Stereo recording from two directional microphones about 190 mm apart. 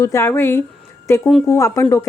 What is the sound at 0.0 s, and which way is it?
Speech, 15° left (ahead or behind).